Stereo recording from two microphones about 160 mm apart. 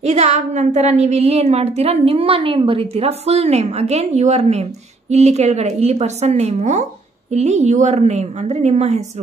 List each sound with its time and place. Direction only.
0.0 s a woman's voice: 45° right (ahead or behind)